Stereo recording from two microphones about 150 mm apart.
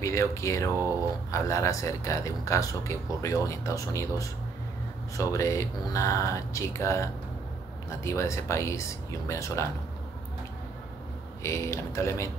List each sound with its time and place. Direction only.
0.0 s speech: 20° left (ahead or behind)
11.4 s speech: 20° left (ahead or behind)